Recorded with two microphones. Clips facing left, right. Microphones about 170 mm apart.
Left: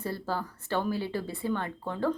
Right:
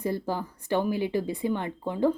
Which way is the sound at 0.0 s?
15° right (ahead or behind).